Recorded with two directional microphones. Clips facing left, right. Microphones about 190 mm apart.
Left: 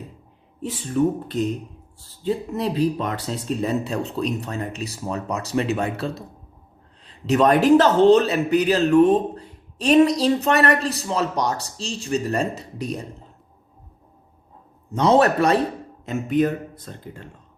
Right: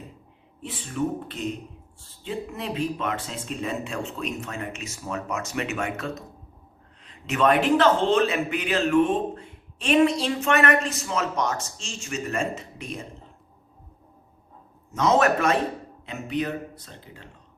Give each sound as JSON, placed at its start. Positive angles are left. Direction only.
{"t": 0.6, "sound": "a man's voice", "side_deg": 40}
{"t": 14.8, "sound": "a man's voice", "side_deg": 35}
{"t": 16.0, "sound": "speech", "side_deg": 45}